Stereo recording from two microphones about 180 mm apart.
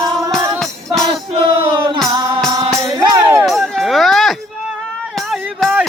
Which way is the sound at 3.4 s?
Centre (ahead or behind).